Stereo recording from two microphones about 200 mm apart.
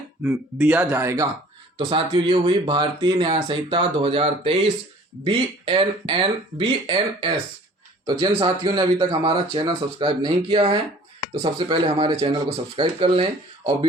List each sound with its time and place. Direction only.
0.2 s speech: 10° right (ahead or behind)
1.8 s speech: 25° right (ahead or behind)